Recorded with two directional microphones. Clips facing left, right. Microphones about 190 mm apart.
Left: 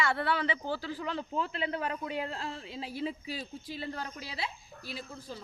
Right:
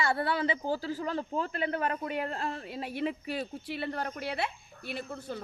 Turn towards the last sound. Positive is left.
turn(degrees=-65)  # may be behind; listen again after turning